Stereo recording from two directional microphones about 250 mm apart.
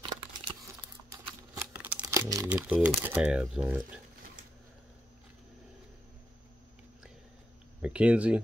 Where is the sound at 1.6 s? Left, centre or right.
Centre.